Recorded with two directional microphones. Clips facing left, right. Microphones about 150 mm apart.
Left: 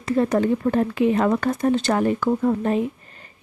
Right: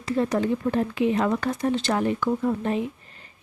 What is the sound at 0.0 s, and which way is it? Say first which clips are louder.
Speech: left 4 dB; 50° left (ahead or behind).